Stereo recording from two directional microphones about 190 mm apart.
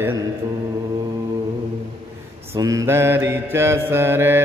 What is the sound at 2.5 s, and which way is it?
A man's voice, 15° right (ahead or behind).